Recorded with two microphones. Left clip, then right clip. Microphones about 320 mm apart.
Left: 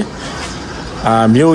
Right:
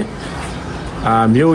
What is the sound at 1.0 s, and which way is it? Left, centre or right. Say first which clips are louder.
Speech: left 2 dB; centre.